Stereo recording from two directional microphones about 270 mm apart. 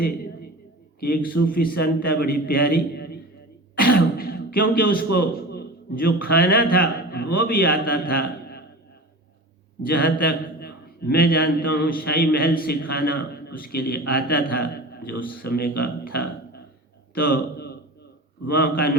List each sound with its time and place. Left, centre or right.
0.9 s a man's voice: left
3.9 s a sound: left
5.1 s a man's voice: left
10.0 s a man's voice: left
15.8 s burping: left
17.2 s a man's voice: left